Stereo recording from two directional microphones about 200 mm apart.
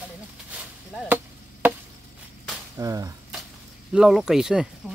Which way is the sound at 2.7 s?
15° right (ahead or behind).